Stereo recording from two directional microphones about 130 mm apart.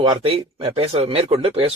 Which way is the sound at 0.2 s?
45° right (ahead or behind).